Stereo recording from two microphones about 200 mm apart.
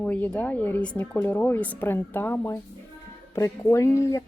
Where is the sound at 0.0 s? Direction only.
5° left (ahead or behind).